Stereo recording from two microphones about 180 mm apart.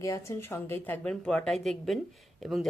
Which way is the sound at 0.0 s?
15° left (ahead or behind).